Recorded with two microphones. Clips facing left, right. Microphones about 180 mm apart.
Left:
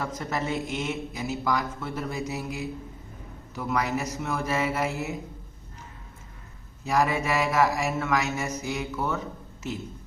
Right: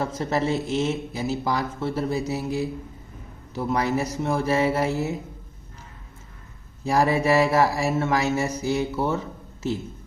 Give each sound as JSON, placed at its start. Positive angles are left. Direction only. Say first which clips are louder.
{"t": 0.0, "sound": "a man's voice", "louder": "right 6 dB", "side_deg": -30}
{"t": 3.5, "sound": "mantra", "louder": "right 4 dB", "side_deg": -30}
{"t": 6.8, "sound": "mantra", "louder": "right 4 dB", "side_deg": -30}